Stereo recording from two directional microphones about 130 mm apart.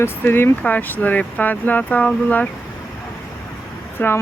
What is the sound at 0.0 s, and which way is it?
Speech, 15° left (ahead or behind).